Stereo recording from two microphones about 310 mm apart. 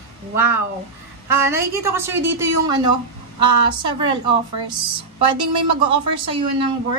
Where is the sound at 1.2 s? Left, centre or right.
Centre.